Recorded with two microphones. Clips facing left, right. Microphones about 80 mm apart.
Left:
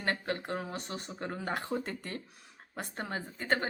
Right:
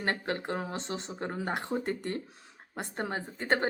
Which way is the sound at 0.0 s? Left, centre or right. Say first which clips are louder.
Right 2 dB; right.